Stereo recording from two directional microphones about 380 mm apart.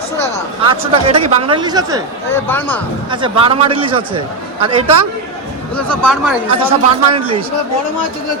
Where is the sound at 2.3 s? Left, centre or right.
Centre.